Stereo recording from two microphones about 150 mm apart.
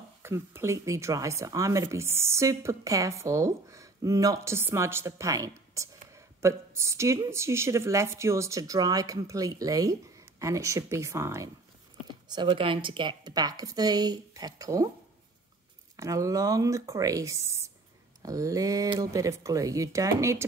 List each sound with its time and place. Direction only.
0.2 s speech: 15° right (ahead or behind)
12.3 s speech: 30° right (ahead or behind)
16.0 s speech: 20° right (ahead or behind)